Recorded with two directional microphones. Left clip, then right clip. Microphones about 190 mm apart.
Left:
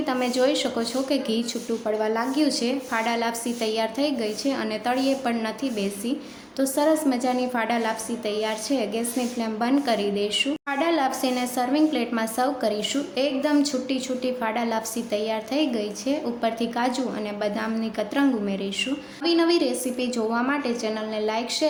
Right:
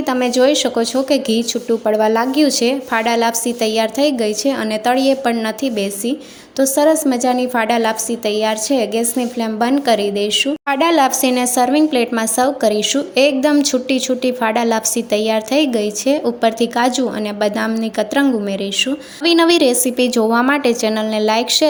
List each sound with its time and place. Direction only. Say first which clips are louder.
0.1 s a woman's voice: right 9 dB; 35° right (ahead or behind)